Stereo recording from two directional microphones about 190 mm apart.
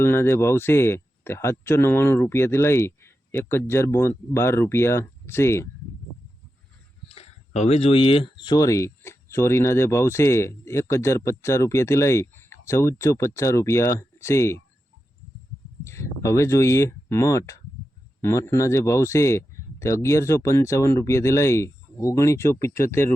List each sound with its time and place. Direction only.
0.0 s speech: 15° left (ahead or behind)
7.1 s speech: 35° left (ahead or behind); by 14.6 s 15° left (ahead or behind)
15.8 s speech: 15° left (ahead or behind)